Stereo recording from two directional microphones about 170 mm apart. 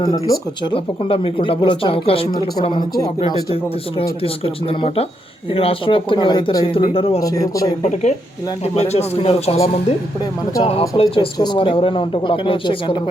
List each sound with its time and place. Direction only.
0.0 s speech: 25° left (ahead or behind)
7.2 s speech: 20° left (ahead or behind)
7.8 s speech: 40° left (ahead or behind)